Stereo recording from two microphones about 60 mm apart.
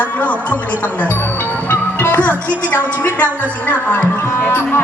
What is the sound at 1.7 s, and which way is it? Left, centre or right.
Music, left.